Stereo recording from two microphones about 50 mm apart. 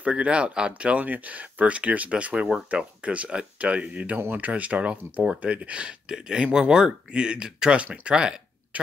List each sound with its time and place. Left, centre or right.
0.0 s speech: right
7.8 s speech: right
8.1 s a sound: centre